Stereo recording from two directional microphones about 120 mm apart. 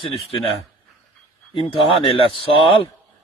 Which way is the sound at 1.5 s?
50° left (ahead or behind).